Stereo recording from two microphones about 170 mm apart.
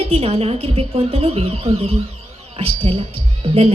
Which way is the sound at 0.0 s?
35° right (ahead or behind).